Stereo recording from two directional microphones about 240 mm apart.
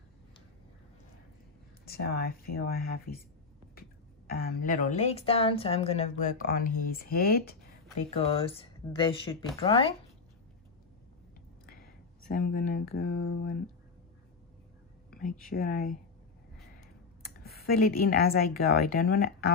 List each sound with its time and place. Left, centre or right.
1.9 s a woman's voice: left
4.3 s a woman's voice: left
8.3 s speech: left
12.3 s a woman's voice: left
15.0 s speech: left
17.4 s a woman's voice: left